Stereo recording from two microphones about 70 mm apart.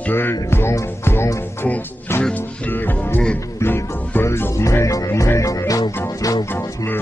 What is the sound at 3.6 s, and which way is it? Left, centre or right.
Music, left.